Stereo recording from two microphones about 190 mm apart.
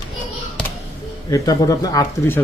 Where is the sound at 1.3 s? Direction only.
20° left (ahead or behind).